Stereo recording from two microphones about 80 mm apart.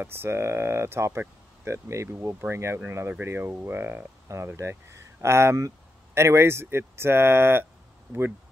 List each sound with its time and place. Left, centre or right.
0.0 s speech: right